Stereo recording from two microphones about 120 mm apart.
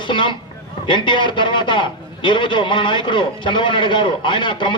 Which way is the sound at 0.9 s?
40° left (ahead or behind).